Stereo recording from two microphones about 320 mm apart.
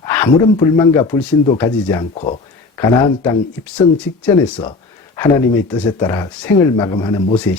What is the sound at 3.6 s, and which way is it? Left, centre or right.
Speech, centre.